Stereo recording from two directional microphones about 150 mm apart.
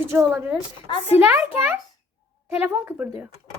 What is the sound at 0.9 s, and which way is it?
Speech, 40° left (ahead or behind).